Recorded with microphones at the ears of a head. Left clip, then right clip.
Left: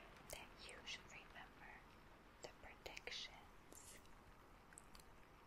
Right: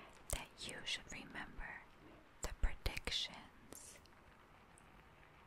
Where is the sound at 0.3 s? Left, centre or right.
Right.